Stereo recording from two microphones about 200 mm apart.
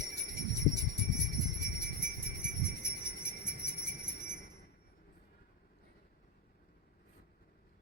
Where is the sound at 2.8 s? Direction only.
55° left (ahead or behind).